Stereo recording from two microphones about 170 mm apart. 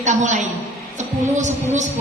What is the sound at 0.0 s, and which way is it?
Speech, 45° right (ahead or behind).